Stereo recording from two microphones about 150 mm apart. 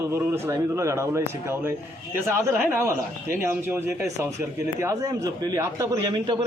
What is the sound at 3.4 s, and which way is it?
A man's voice, 15° right (ahead or behind).